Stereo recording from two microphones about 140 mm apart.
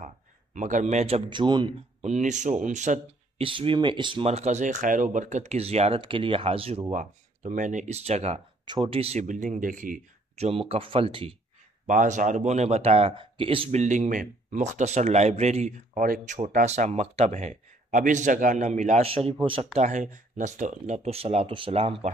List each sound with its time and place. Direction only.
0.6 s speech: 60° right (ahead or behind)
1.3 s speech: 30° right (ahead or behind)
2.0 s speech: 55° right (ahead or behind)
3.4 s speech: 40° right (ahead or behind)
6.9 s speech: 65° right (ahead or behind); by 8.4 s 50° right (ahead or behind)
8.6 s speech: 35° right (ahead or behind)
9.2 s speech: 65° right (ahead or behind)
10.3 s speech: 45° right (ahead or behind)
11.9 s speech: 65° right (ahead or behind); by 13.7 s 40° right (ahead or behind)
13.7 s speech: 60° right (ahead or behind); by 22.1 s 45° right (ahead or behind)